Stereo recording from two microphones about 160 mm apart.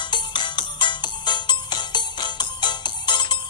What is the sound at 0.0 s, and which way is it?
Music, 30° left (ahead or behind).